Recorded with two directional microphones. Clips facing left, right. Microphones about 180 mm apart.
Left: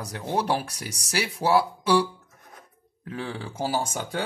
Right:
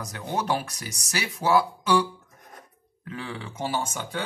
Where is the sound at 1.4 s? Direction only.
30° left (ahead or behind).